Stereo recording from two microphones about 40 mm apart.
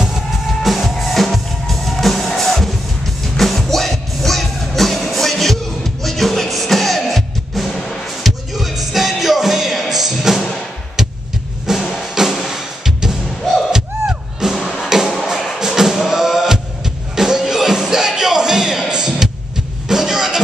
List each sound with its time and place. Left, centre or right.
0.6 s music: centre
7.7 s music: centre
8.2 s music: centre
11.7 s music: centre
14.6 s music: centre
14.9 s music: centre